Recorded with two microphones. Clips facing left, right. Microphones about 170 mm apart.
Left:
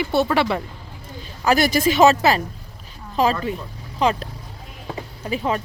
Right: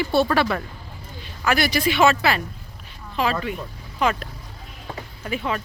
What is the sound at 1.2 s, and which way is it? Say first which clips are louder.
A woman's voice: left 4 dB; 40° left (ahead or behind).